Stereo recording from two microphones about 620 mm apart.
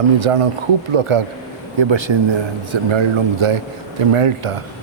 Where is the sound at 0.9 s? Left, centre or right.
Right.